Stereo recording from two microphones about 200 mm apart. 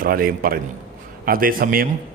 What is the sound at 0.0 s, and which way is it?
A man's voice, 45° right (ahead or behind).